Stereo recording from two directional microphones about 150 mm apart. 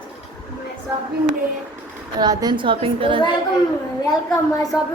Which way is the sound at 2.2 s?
25° right (ahead or behind).